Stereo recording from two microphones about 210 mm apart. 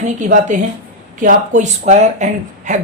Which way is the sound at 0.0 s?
35° right (ahead or behind).